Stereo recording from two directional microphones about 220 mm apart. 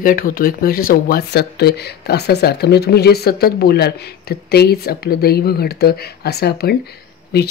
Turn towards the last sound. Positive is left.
turn(degrees=45)  # may be behind; listen again after turning